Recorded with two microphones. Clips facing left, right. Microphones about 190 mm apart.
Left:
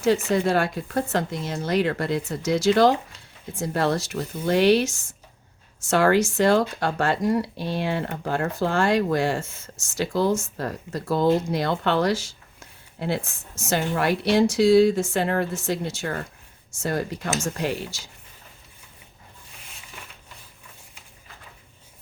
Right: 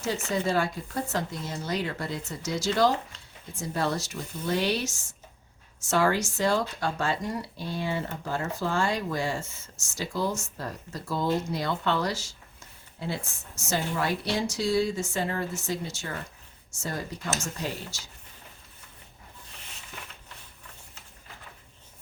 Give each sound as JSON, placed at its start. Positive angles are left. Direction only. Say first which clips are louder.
{"t": 0.3, "sound": "speech", "louder": "left 5 dB", "side_deg": 65}
{"t": 3.5, "sound": "a woman's voice", "louder": "left 6 dB", "side_deg": 60}